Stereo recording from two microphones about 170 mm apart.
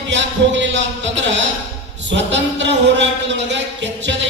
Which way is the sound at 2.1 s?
90° right.